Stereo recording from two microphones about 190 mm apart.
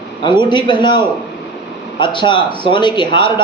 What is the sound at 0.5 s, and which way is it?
A man's voice, 25° left (ahead or behind).